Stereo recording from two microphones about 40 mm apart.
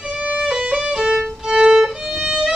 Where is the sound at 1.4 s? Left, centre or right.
Centre.